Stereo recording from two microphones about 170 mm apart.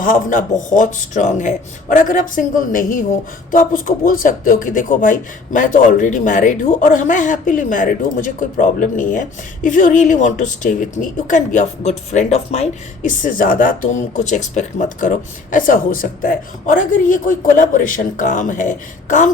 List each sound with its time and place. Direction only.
0.0 s speech: 50° left (ahead or behind)